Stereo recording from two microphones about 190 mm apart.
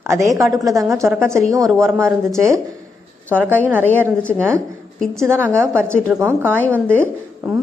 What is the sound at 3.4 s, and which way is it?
Speech, 10° right (ahead or behind).